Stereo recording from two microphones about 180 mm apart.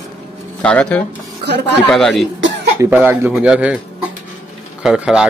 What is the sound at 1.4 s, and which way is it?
Speech, 70° right (ahead or behind).